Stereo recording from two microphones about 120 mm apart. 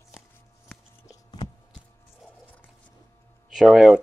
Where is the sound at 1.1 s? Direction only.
35° left (ahead or behind).